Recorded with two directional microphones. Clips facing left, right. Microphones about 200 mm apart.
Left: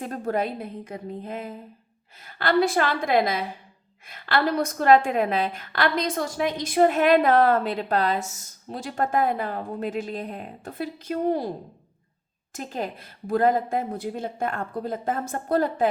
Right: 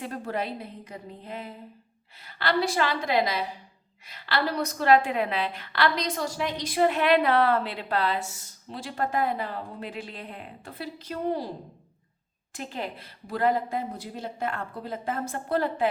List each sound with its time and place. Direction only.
0.0 s a woman's voice: 45° left (ahead or behind)
12.5 s a woman's voice: 45° left (ahead or behind)